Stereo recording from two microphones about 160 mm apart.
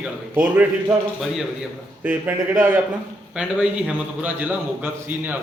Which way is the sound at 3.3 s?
5° right (ahead or behind).